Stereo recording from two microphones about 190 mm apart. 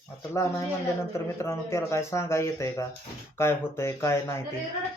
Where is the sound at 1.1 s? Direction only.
15° left (ahead or behind).